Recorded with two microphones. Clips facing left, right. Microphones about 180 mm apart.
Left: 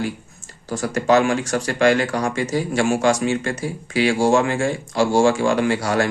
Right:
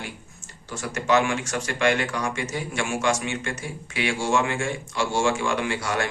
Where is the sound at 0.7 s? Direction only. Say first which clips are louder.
Left 6 dB; 35° left (ahead or behind).